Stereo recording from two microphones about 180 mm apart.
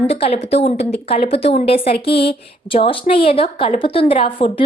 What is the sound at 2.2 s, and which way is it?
A woman's voice, 30° left (ahead or behind).